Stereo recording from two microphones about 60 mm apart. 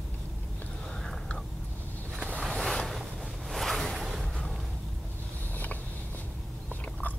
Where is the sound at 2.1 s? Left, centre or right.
Right.